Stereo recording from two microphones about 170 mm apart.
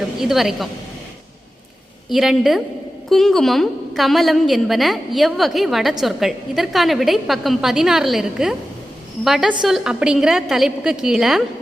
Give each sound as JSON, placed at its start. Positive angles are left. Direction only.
{"t": 0.2, "sound": "a woman's voice", "side_deg": 0}
{"t": 2.0, "sound": "a woman's voice", "side_deg": 0}